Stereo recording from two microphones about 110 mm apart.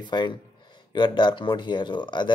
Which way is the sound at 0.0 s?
45° left (ahead or behind).